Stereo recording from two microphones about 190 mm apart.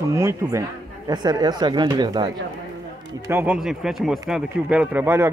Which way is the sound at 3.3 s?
10° right (ahead or behind).